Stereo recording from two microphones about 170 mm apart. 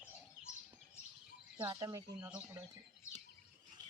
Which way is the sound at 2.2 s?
5° right (ahead or behind).